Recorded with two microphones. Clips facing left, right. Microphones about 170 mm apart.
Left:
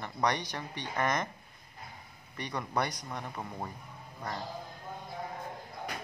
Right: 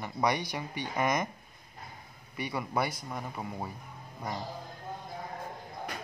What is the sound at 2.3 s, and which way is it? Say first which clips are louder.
Speech: right 2 dB; 10° right (ahead or behind).